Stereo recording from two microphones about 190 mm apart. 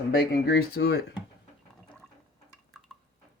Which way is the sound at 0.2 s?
60° left (ahead or behind).